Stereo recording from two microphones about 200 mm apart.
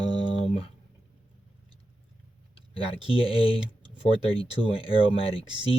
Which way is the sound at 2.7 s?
25° left (ahead or behind).